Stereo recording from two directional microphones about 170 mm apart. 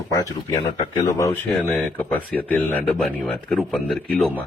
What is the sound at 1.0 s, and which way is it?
Speech, 20° left (ahead or behind).